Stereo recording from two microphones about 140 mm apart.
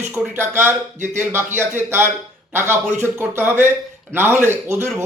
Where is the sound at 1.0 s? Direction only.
60° right (ahead or behind).